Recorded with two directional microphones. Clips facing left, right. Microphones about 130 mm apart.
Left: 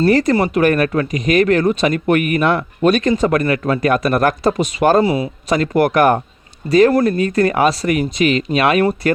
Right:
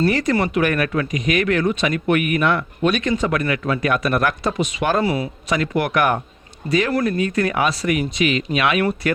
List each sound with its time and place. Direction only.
0.0 s speech: 35° left (ahead or behind)
5.0 s a man's voice: 25° left (ahead or behind)
5.5 s speech: 40° left (ahead or behind)